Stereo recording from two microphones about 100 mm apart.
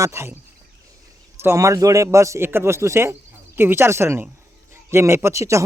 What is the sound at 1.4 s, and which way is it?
A man's voice, 30° right (ahead or behind).